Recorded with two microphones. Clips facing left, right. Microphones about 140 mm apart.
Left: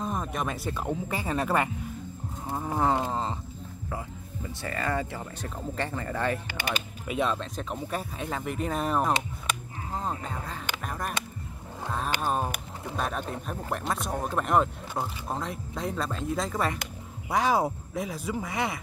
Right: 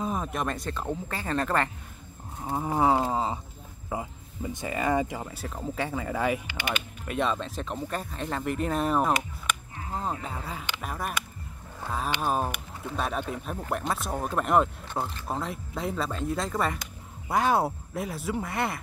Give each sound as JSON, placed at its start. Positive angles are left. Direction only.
{"t": 0.0, "sound": "speech", "side_deg": 0}
{"t": 2.4, "sound": "speech", "side_deg": -10}
{"t": 6.4, "sound": "speech", "side_deg": 40}
{"t": 7.1, "sound": "speech", "side_deg": 0}
{"t": 10.8, "sound": "a sound", "side_deg": -5}
{"t": 12.2, "sound": "speech", "side_deg": -5}